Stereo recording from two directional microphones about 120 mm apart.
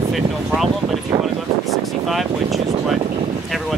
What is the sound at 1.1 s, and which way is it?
Speech, 30° right (ahead or behind).